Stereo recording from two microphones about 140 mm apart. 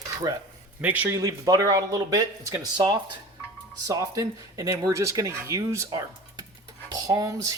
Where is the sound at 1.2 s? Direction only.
25° right (ahead or behind).